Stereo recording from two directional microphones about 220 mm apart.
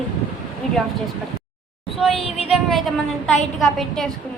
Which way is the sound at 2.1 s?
25° left (ahead or behind).